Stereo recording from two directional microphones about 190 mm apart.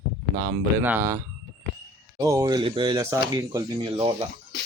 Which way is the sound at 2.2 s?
20° right (ahead or behind).